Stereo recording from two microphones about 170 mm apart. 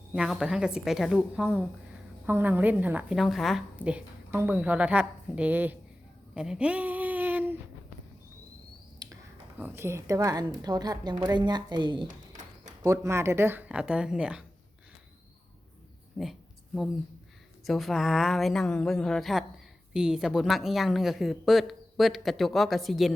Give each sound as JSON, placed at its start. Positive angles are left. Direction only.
{"t": 0.1, "sound": "a woman's voice", "side_deg": -5}
{"t": 6.3, "sound": "a sound", "side_deg": -5}
{"t": 9.0, "sound": "a sound", "side_deg": -25}
{"t": 9.6, "sound": "a woman's voice", "side_deg": -10}
{"t": 16.2, "sound": "a woman's voice", "side_deg": 0}
{"t": 17.7, "sound": "a woman's voice", "side_deg": 0}